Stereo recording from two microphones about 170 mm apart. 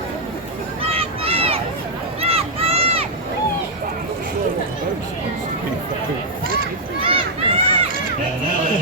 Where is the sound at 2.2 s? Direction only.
35° right (ahead or behind).